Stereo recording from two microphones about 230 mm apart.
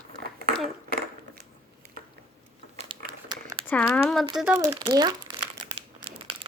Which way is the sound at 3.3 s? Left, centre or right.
Centre.